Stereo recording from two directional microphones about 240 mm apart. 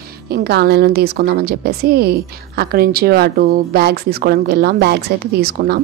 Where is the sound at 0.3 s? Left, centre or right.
Right.